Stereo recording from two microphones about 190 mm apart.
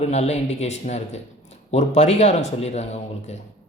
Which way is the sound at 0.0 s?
35° left (ahead or behind).